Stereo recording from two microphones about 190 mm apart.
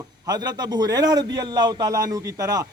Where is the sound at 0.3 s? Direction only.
20° right (ahead or behind).